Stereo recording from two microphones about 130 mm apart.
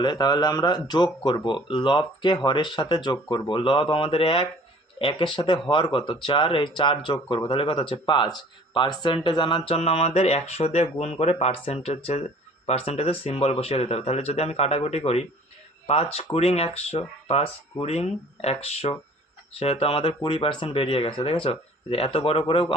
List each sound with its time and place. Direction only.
0.0 s speech: 35° left (ahead or behind)